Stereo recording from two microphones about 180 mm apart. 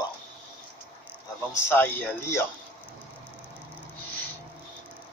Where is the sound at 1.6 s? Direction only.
10° left (ahead or behind).